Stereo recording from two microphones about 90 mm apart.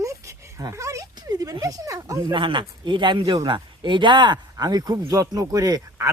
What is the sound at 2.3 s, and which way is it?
Speech, 65° right (ahead or behind).